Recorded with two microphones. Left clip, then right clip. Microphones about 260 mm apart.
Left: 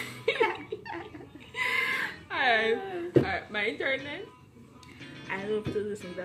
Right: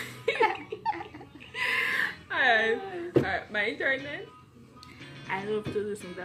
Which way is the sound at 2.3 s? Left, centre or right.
Centre.